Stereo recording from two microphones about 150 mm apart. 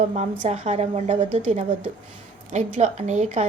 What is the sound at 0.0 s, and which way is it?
A woman's voice, 50° right (ahead or behind).